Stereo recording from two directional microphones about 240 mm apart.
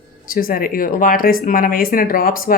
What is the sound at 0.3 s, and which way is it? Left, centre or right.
Speech, left.